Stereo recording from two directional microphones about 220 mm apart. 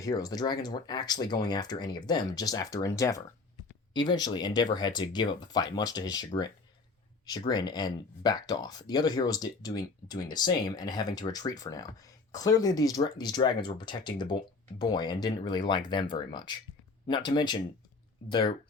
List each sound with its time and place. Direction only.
0.0 s speech: 15° left (ahead or behind)